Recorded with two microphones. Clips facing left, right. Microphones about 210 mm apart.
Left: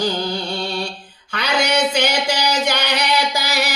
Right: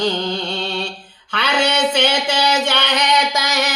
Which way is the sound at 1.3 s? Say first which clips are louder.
Right 1 dB; 10° left (ahead or behind).